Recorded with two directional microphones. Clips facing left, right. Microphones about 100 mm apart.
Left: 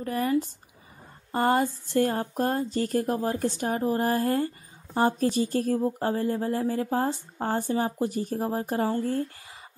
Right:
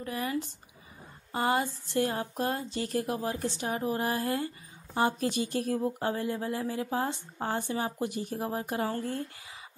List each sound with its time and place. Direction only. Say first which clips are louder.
0.0 s speech: left 7 dB; 40° left (ahead or behind)